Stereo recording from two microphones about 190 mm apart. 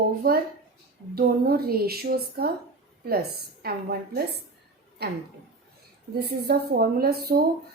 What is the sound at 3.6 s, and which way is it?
A woman's voice, 55° right (ahead or behind).